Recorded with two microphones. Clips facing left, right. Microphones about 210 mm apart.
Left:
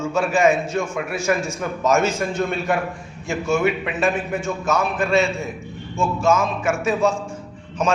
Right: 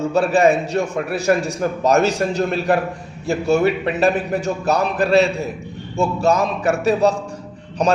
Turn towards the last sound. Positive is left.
turn(degrees=-35)  # may be behind; listen again after turning